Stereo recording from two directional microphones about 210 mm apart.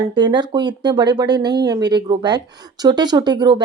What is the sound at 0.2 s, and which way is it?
Speech, 20° right (ahead or behind).